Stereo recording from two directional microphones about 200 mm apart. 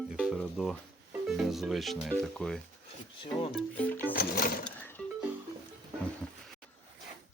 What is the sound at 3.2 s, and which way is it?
Speech, 30° left (ahead or behind).